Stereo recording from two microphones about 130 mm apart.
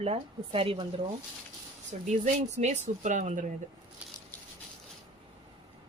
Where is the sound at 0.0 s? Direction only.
50° right (ahead or behind).